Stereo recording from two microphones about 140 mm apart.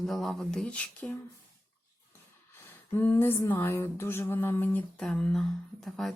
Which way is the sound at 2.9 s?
20° left (ahead or behind).